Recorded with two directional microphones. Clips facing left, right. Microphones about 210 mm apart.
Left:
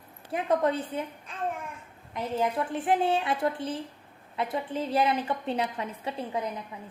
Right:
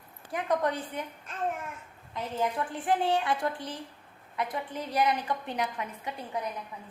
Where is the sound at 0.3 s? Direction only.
25° left (ahead or behind).